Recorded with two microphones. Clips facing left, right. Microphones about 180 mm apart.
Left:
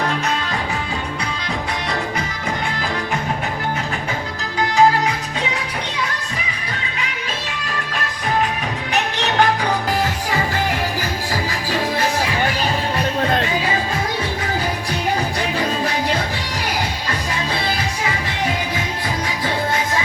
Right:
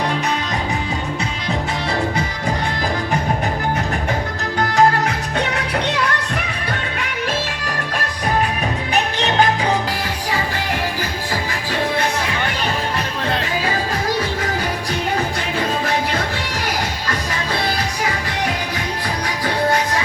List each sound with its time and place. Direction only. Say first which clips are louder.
5.0 s music: right 2 dB; 65° right (ahead or behind)